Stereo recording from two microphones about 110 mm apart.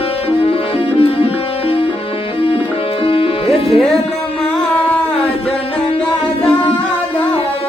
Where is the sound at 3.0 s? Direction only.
55° left (ahead or behind).